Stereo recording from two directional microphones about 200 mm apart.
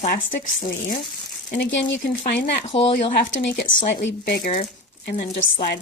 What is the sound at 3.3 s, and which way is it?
Speech, 70° left (ahead or behind).